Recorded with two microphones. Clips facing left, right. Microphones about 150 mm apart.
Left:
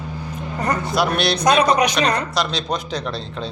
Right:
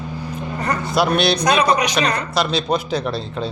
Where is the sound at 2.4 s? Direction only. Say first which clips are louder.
Right 3 dB; 5° right (ahead or behind).